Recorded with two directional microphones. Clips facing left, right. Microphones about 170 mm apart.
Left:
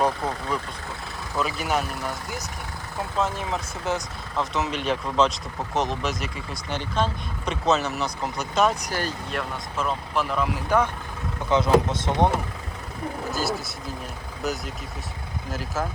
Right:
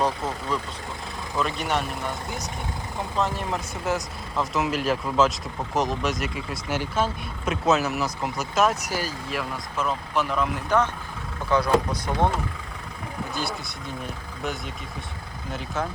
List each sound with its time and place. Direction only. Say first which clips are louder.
0.5 s speech: even; 10° left (ahead or behind)
11.4 s speech: left 2 dB; 20° left (ahead or behind)
14.4 s speech: left 2 dB; centre (ahead or behind)